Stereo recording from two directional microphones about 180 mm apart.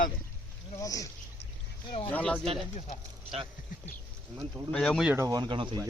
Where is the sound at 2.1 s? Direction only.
5° left (ahead or behind).